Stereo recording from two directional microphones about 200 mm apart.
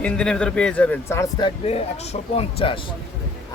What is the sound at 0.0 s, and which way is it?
Speech, 5° left (ahead or behind).